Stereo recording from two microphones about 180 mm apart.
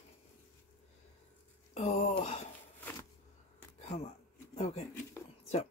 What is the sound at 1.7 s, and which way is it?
Speech, 35° left (ahead or behind).